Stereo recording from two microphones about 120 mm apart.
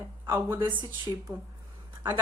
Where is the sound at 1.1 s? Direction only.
25° left (ahead or behind).